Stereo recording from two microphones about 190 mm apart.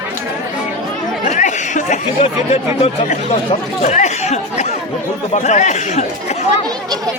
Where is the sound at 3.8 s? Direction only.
40° left (ahead or behind).